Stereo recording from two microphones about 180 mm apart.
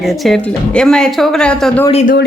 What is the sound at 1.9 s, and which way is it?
Speech, 40° left (ahead or behind).